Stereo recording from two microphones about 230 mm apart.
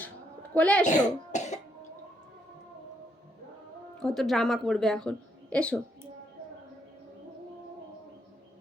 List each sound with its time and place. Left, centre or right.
0.5 s speech: centre
0.9 s speech: left
4.0 s speech: centre